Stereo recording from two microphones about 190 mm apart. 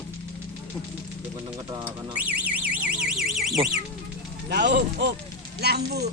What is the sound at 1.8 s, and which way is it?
Alarm, 10° right (ahead or behind).